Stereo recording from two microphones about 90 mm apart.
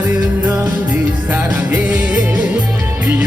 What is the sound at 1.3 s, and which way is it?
Music, 25° right (ahead or behind).